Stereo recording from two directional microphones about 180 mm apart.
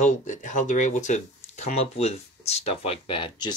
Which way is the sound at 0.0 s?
45° left (ahead or behind).